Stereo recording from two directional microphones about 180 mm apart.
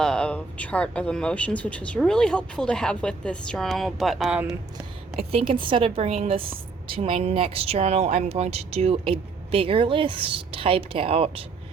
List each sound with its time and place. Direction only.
0.0 s speech: 5° left (ahead or behind)
5.1 s speech: 30° right (ahead or behind)